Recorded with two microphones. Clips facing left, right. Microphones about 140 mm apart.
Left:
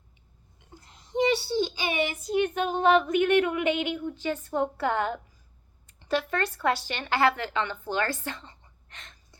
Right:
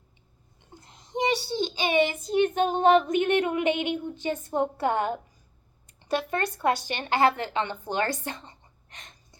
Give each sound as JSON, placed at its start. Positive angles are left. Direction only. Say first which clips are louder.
{"t": 0.7, "sound": "a child's voice", "louder": "left 1 dB", "side_deg": -20}